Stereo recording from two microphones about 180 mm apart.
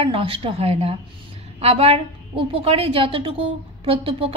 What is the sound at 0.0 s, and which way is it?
A woman's voice, 30° right (ahead or behind).